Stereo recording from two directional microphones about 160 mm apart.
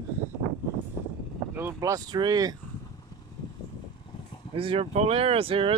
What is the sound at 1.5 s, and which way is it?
Speech, 15° right (ahead or behind).